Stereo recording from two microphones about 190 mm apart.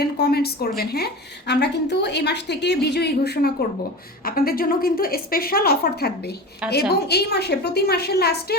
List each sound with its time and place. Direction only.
0.0 s a woman's voice: 55° left (ahead or behind)